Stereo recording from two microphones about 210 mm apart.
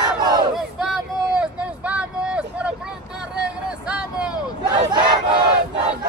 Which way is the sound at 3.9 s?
5° right (ahead or behind).